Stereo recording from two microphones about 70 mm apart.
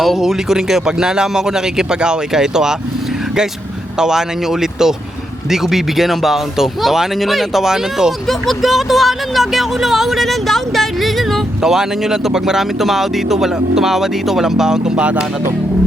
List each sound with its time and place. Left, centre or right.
0.0 s speech: centre
3.9 s speech: centre